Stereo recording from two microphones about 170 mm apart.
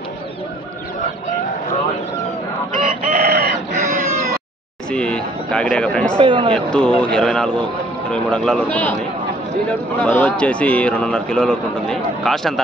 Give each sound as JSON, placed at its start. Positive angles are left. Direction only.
{"t": 2.8, "sound": "chicken", "side_deg": -60}
{"t": 4.9, "sound": "speech", "side_deg": 5}
{"t": 6.2, "sound": "speech", "side_deg": -30}
{"t": 6.5, "sound": "speech", "side_deg": 5}
{"t": 9.9, "sound": "a man's voice", "side_deg": 10}